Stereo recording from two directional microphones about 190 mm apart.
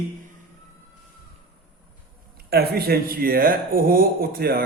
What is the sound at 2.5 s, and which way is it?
Speech, 55° right (ahead or behind).